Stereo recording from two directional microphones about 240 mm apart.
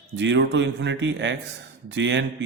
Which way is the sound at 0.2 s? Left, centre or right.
Right.